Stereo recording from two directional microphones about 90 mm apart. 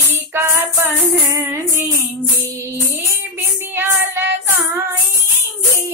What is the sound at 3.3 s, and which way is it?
Child singing, 25° right (ahead or behind).